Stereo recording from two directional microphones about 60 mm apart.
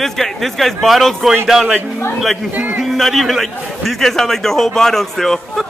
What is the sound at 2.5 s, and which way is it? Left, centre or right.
Speech, right.